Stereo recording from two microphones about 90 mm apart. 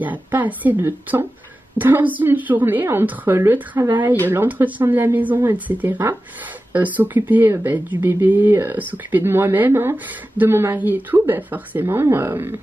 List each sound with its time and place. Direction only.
0.0 s speech: 20° right (ahead or behind)